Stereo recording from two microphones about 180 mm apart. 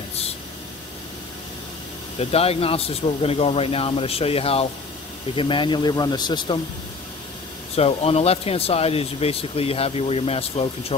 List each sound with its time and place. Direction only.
2.1 s speech: 35° left (ahead or behind)
7.7 s speech: 35° left (ahead or behind)